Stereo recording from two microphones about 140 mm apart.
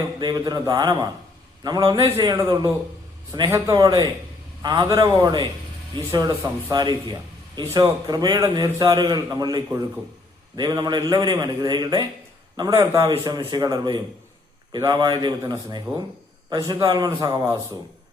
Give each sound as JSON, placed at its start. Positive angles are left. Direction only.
{"t": 0.2, "sound": "a man's voice", "side_deg": -30}